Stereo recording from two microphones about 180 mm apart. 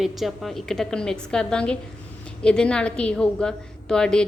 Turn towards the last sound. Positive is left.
turn(degrees=5)  # may be behind; listen again after turning